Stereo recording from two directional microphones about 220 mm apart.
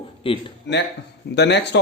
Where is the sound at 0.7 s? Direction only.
50° left (ahead or behind).